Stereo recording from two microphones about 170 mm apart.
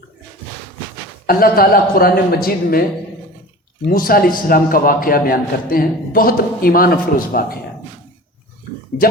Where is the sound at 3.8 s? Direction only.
60° left (ahead or behind).